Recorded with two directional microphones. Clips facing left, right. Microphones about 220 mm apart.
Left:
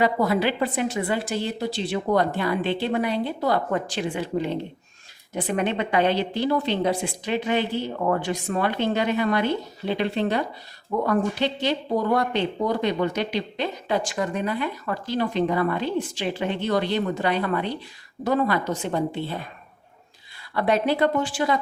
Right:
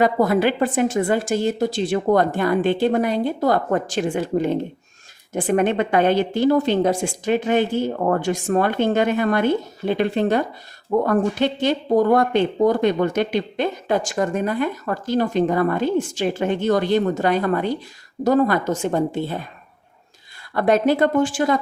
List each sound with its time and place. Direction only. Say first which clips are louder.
0.0 s speech: right 4 dB; 50° right (ahead or behind)
20.5 s speech: right 5 dB; 45° right (ahead or behind)